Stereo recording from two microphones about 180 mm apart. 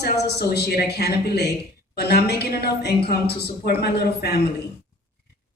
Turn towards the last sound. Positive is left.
turn(degrees=60)  # may be behind; listen again after turning